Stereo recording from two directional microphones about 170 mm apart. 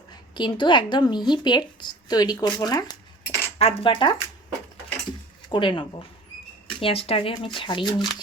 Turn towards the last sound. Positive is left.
turn(degrees=30)  # may be behind; listen again after turning